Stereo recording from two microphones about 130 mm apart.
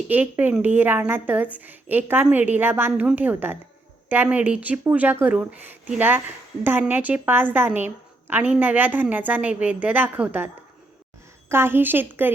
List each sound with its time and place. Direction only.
0.1 s speech: 15° right (ahead or behind)